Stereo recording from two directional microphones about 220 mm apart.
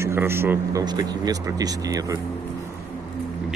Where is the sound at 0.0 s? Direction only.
10° right (ahead or behind).